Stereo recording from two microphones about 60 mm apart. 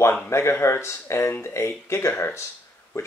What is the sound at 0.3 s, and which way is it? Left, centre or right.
Speech, left.